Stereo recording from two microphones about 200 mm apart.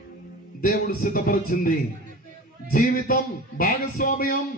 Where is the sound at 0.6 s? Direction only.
45° left (ahead or behind).